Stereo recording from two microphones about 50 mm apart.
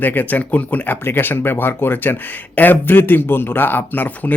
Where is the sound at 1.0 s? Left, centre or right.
Left.